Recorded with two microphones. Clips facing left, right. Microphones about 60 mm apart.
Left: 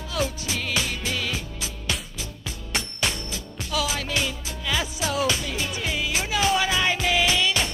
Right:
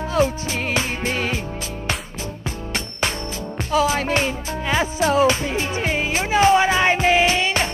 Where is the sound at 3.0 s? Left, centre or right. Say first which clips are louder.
Right 4 dB; right.